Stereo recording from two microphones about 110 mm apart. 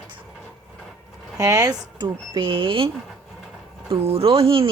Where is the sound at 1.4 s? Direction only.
35° right (ahead or behind).